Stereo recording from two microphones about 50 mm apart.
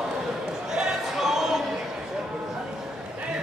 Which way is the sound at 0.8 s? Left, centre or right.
Centre.